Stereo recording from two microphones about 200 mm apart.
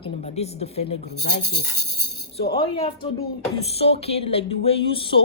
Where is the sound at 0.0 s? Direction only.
35° left (ahead or behind).